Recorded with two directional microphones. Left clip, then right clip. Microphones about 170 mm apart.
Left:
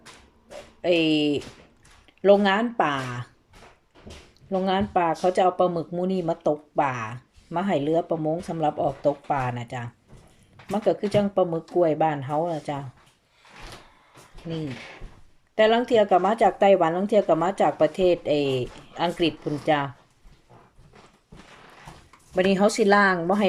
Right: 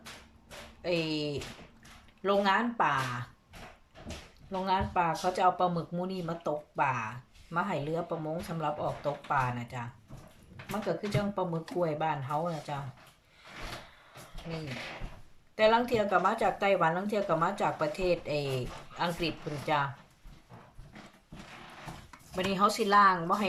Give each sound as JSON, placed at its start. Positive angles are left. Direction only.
{"t": 0.8, "sound": "speech", "side_deg": 55}
{"t": 4.6, "sound": "speech", "side_deg": 50}
{"t": 10.8, "sound": "speech", "side_deg": 50}
{"t": 15.5, "sound": "speech", "side_deg": 45}
{"t": 22.4, "sound": "speech", "side_deg": 50}